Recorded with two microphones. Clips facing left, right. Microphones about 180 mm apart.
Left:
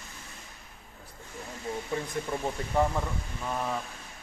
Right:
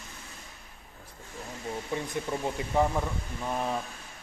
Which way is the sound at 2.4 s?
5° right (ahead or behind).